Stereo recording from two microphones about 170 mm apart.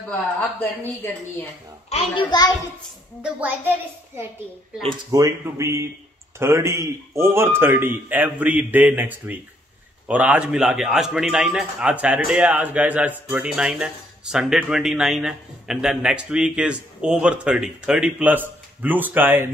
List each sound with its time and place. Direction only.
0.1 s speech: 10° left (ahead or behind)
1.9 s a child's voice: 35° left (ahead or behind)
3.2 s a man's voice: 10° right (ahead or behind)